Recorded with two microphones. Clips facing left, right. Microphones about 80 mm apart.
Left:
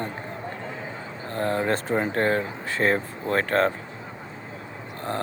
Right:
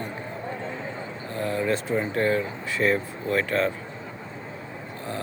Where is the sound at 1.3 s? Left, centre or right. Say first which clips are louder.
Left 1 dB; left.